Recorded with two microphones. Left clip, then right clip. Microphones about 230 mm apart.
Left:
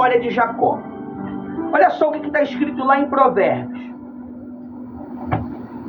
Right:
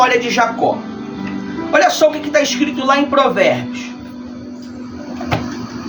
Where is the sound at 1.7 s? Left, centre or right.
Right.